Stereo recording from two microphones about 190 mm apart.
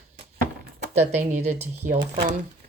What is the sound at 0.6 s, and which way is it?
Speech, 45° right (ahead or behind).